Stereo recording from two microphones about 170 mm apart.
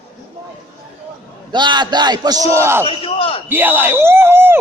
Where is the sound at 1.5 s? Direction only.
25° right (ahead or behind).